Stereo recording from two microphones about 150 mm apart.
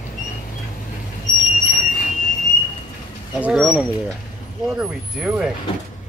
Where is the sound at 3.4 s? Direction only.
5° right (ahead or behind).